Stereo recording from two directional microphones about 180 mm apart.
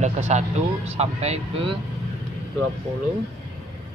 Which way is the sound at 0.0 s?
40° right (ahead or behind).